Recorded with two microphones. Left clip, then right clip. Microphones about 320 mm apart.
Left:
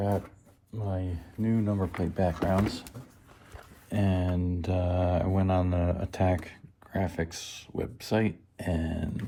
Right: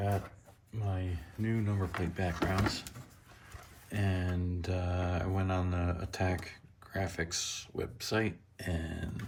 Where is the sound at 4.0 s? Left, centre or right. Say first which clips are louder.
Left 7 dB; centre.